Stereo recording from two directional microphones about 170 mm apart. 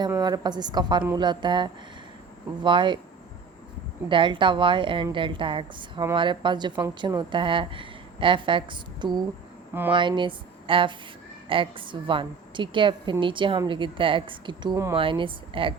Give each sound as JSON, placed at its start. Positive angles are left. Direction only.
{"t": 0.2, "sound": "a woman's voice", "side_deg": -25}
{"t": 4.1, "sound": "a woman's voice", "side_deg": -30}